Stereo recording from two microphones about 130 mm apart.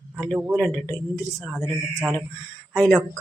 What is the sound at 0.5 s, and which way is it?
Speech, 10° left (ahead or behind).